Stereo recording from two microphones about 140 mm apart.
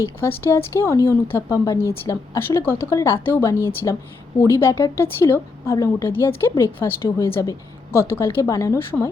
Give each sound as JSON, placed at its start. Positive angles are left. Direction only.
{"t": 0.0, "sound": "a woman's voice", "side_deg": 15}